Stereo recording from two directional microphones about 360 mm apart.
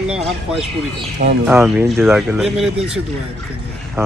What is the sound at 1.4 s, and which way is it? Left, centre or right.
Speech, centre.